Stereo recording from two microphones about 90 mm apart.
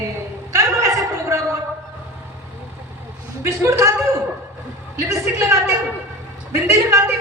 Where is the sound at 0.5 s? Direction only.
35° right (ahead or behind).